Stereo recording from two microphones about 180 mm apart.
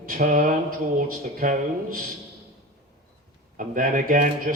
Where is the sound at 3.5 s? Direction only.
50° right (ahead or behind).